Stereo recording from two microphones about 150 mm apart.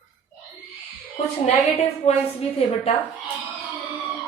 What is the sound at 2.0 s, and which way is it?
Speech, 45° left (ahead or behind).